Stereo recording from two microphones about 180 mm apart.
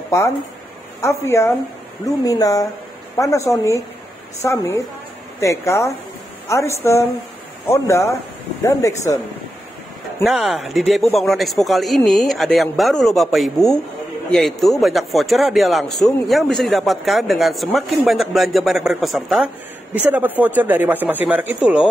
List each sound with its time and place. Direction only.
0.1 s a woman's voice: 15° left (ahead or behind)
10.2 s speech: centre (ahead or behind)